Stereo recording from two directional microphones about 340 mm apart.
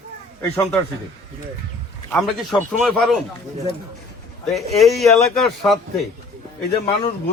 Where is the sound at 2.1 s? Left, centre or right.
Centre.